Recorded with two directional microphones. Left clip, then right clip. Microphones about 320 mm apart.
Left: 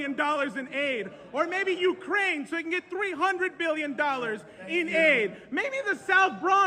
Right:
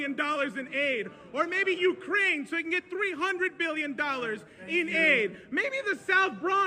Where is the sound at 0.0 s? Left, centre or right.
Centre.